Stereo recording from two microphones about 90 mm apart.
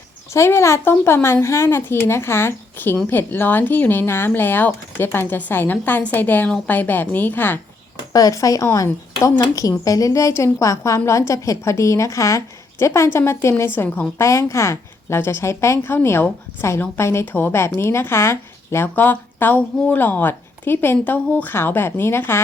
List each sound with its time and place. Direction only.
0.3 s speech: 30° left (ahead or behind)
8.1 s a woman's voice: 40° left (ahead or behind); by 14.3 s 20° left (ahead or behind)
14.3 s a woman's voice: 35° left (ahead or behind)